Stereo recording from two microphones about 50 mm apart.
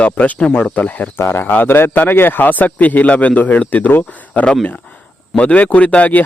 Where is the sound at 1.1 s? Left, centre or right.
Left.